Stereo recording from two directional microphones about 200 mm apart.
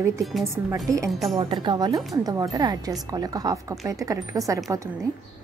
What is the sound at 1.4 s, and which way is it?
A woman's voice, 25° right (ahead or behind).